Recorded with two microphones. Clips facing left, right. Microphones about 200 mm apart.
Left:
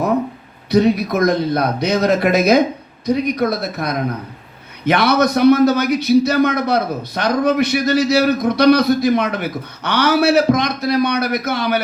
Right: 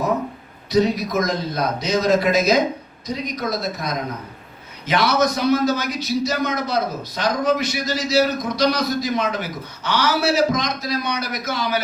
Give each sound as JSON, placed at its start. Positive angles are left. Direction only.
{"t": 0.7, "sound": "a man's voice", "side_deg": 60}